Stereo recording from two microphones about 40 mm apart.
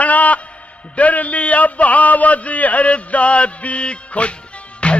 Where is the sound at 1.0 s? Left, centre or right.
Left.